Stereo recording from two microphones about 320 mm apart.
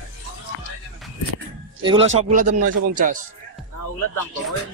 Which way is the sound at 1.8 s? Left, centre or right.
Centre.